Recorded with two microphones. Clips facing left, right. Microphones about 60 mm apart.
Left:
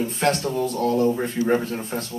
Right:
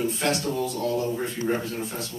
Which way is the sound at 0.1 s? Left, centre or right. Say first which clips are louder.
Left 4 dB; left.